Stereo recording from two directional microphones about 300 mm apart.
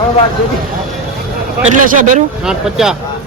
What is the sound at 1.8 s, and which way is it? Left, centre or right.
Speech, right.